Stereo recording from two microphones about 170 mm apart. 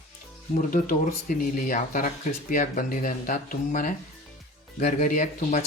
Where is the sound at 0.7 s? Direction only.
50° left (ahead or behind).